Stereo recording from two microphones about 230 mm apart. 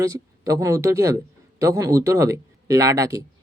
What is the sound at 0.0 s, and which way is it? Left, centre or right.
A man's voice, centre.